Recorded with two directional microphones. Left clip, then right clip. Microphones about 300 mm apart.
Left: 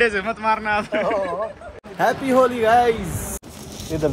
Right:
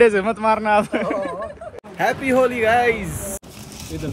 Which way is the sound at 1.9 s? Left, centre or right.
Centre.